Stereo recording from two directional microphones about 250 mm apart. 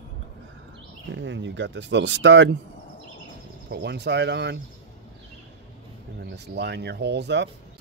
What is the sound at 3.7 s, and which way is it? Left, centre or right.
Speech, right.